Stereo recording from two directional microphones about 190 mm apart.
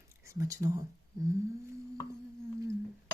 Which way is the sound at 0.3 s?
15° right (ahead or behind).